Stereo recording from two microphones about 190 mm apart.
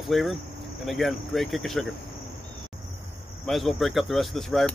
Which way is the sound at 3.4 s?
Centre (ahead or behind).